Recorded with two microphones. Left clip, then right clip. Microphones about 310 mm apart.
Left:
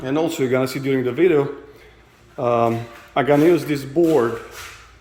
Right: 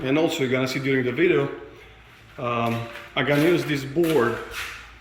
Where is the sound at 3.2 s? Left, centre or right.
Centre.